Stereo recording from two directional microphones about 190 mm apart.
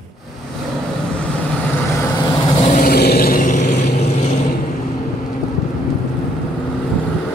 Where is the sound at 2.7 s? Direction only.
50° left (ahead or behind).